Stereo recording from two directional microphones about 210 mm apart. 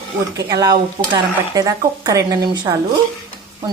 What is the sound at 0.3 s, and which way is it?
Speech, 15° right (ahead or behind).